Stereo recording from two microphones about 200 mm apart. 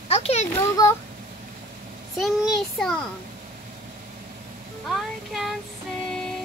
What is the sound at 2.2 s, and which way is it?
Speech, centre (ahead or behind).